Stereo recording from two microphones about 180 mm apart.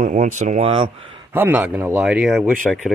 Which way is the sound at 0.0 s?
45° right (ahead or behind).